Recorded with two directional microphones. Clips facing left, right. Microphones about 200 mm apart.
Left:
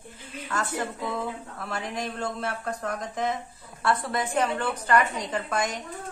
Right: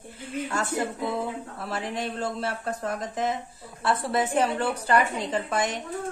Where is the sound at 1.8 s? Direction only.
Centre (ahead or behind).